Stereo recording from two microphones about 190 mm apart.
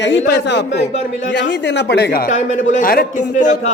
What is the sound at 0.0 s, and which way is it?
Speech, 65° left (ahead or behind).